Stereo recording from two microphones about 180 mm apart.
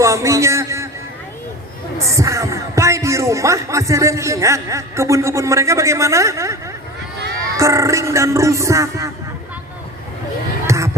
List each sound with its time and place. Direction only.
0.0 s a sound: 15° right (ahead or behind)
2.0 s speech: 15° right (ahead or behind)
7.5 s music: 15° right (ahead or behind)
10.7 s music: 15° right (ahead or behind)